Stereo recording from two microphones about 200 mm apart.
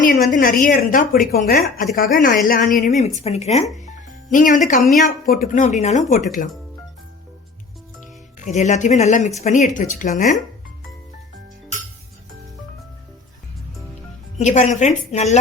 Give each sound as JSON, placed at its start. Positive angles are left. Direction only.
{"t": 0.0, "sound": "a woman's voice", "side_deg": 40}
{"t": 8.4, "sound": "speech", "side_deg": 35}
{"t": 14.3, "sound": "speech", "side_deg": 35}